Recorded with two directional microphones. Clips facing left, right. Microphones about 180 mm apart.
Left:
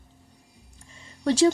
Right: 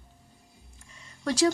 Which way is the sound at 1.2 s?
30° left (ahead or behind).